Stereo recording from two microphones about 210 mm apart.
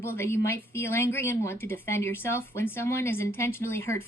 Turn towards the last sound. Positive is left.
turn(degrees=10)  # may be behind; listen again after turning